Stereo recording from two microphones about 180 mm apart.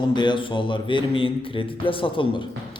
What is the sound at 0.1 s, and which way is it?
Speech, 25° left (ahead or behind).